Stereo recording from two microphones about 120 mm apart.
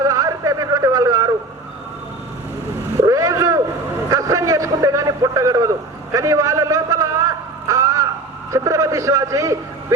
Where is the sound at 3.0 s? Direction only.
25° right (ahead or behind).